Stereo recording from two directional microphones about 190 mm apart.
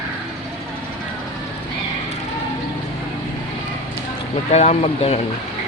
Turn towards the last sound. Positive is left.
turn(degrees=35)  # may be behind; listen again after turning